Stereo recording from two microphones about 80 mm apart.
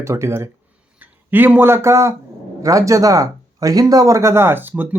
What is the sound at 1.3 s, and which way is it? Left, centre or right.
Speech, right.